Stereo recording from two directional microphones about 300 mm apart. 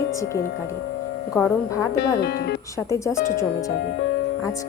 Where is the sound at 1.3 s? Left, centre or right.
Centre.